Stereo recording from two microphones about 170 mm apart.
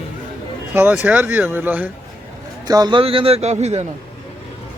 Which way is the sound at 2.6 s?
25° right (ahead or behind).